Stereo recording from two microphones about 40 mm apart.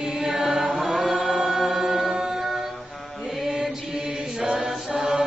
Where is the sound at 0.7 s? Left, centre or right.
Centre.